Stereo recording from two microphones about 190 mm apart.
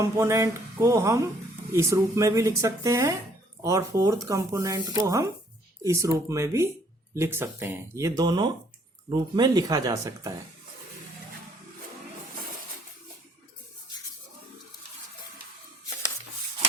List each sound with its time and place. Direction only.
0.0 s speech: 15° right (ahead or behind)